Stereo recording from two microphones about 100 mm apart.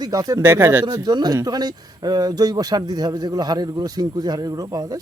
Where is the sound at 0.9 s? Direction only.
45° right (ahead or behind).